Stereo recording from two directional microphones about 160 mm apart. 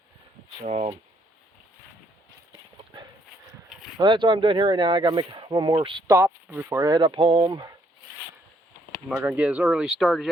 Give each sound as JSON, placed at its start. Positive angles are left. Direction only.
{"t": 0.6, "sound": "speech", "side_deg": -45}
{"t": 3.9, "sound": "speech", "side_deg": -30}
{"t": 6.1, "sound": "speech", "side_deg": -15}
{"t": 9.0, "sound": "speech", "side_deg": -5}